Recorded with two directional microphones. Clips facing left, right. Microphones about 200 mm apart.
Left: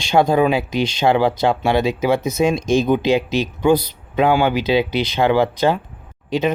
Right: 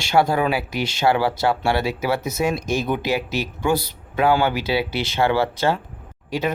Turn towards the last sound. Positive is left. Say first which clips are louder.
# left 5 dB
turn(degrees=20)  # may be behind; listen again after turning